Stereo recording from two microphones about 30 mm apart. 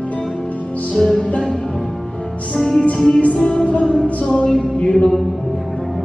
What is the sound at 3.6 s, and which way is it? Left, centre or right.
Music, left.